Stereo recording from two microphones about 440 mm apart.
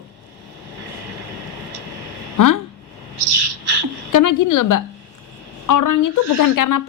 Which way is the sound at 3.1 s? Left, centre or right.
Right.